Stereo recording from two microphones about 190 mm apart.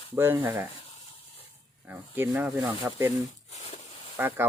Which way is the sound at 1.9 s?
10° right (ahead or behind).